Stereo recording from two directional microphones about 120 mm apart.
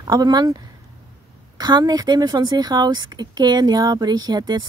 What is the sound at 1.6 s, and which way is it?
Speech, 35° right (ahead or behind).